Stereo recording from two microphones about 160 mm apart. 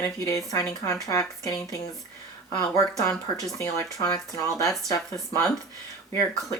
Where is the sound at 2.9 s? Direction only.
20° left (ahead or behind).